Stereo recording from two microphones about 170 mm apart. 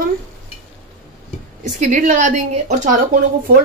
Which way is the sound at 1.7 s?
45° right (ahead or behind).